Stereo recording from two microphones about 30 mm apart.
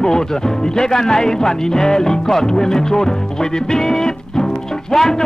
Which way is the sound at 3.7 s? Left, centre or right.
Centre.